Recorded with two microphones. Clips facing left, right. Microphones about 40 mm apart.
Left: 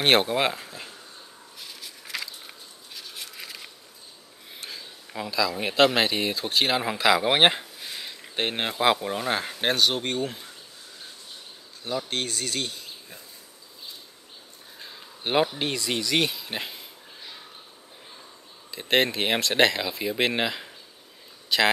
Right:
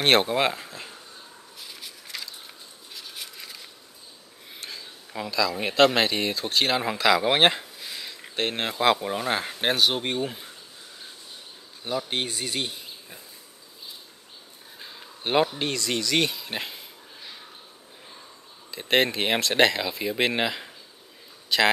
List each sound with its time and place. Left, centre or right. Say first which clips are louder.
0.0 s speech: even; centre
4.6 s speech: even; centre
11.8 s speech: right 1 dB; centre
14.8 s speech: even; centre
18.7 s speech: even; centre